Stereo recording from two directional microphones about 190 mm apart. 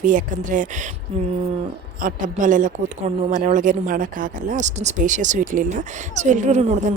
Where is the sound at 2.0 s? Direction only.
45° right (ahead or behind).